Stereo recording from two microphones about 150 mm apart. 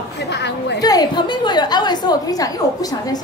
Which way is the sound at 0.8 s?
25° left (ahead or behind).